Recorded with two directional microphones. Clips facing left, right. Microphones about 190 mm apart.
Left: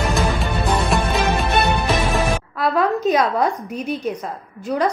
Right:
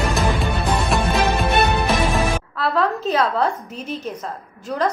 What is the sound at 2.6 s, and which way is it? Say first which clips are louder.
A woman's voice: left 2 dB; 15° left (ahead or behind).